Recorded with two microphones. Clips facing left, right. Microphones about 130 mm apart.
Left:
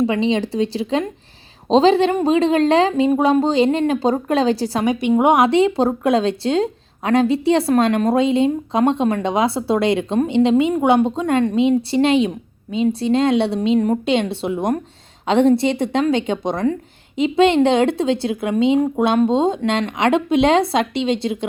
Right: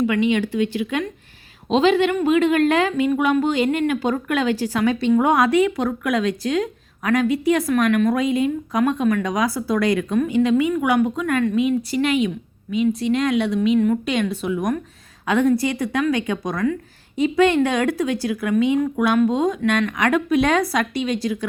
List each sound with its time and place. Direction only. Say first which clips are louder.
0.0 s a woman's voice: left 1 dB; 30° left (ahead or behind)
4.9 s a woman's voice: left 3 dB; 15° left (ahead or behind); by 14.0 s 40° left (ahead or behind)
14.0 s a woman's voice: left 3 dB; 25° left (ahead or behind)